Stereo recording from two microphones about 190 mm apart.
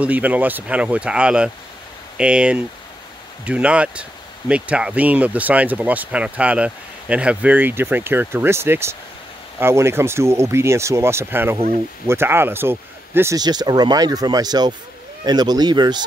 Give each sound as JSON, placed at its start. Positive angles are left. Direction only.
{"t": 0.0, "sound": "speech", "side_deg": -10}
{"t": 11.5, "sound": "speech", "side_deg": -35}
{"t": 12.1, "sound": "speech", "side_deg": -10}